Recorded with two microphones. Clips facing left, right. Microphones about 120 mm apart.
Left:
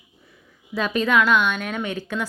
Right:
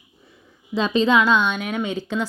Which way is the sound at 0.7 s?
25° right (ahead or behind).